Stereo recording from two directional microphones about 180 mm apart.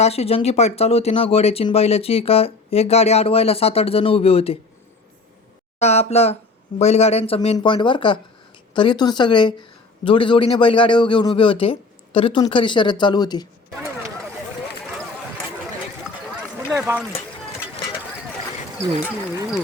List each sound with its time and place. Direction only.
0.0 s speech: 35° left (ahead or behind)
5.8 s speech: 35° left (ahead or behind)
16.7 s speech: 5° right (ahead or behind)